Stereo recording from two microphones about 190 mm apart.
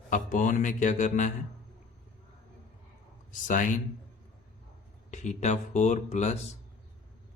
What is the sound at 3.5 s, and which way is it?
Speech, 45° left (ahead or behind).